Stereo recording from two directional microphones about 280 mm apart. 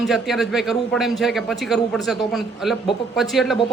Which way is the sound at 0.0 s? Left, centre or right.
Centre.